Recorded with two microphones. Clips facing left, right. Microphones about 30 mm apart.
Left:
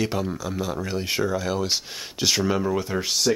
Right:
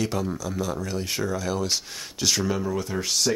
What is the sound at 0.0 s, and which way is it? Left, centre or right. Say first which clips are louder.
Speech: left 1 dB; centre.